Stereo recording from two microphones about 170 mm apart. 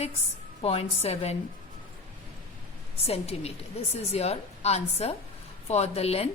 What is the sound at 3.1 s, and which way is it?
A woman's voice, 35° left (ahead or behind).